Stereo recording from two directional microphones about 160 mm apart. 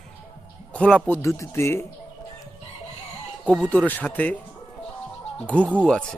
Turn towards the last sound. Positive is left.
turn(degrees=5)  # may be behind; listen again after turning